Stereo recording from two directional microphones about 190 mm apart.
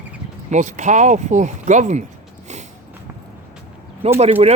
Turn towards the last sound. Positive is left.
turn(degrees=-35)  # may be behind; listen again after turning